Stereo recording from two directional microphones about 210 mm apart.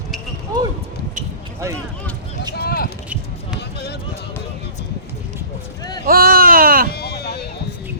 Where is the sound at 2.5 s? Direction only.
50° left (ahead or behind).